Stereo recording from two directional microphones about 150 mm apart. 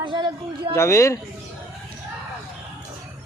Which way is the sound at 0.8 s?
20° left (ahead or behind).